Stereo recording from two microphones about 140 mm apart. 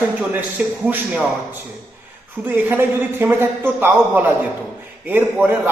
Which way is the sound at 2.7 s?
15° right (ahead or behind).